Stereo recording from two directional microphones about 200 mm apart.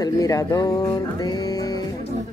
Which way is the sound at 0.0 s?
15° left (ahead or behind).